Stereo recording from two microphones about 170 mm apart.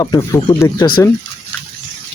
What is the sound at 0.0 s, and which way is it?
Speech, 20° left (ahead or behind).